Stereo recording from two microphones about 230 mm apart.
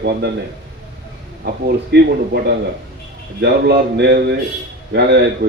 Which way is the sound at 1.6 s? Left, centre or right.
Right.